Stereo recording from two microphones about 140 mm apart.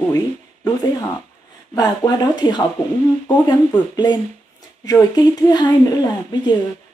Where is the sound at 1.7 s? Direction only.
30° left (ahead or behind).